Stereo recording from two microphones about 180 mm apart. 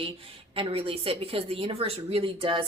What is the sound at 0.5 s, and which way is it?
A woman's voice, 30° right (ahead or behind).